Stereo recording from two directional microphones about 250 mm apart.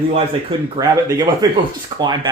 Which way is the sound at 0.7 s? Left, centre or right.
Centre.